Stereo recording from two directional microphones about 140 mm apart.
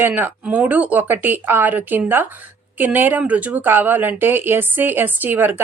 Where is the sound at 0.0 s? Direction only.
15° right (ahead or behind).